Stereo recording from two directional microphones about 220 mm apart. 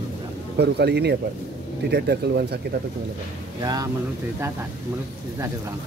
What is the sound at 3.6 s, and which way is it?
Speech, 15° right (ahead or behind).